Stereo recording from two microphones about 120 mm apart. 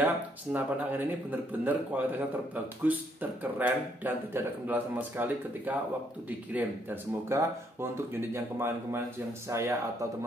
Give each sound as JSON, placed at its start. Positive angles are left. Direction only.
{"t": 0.0, "sound": "speech", "side_deg": -15}